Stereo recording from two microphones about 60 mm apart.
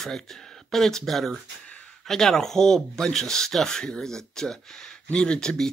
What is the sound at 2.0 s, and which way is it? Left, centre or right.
Speech, centre.